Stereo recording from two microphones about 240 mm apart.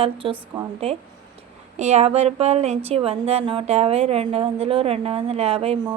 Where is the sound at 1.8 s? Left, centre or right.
Right.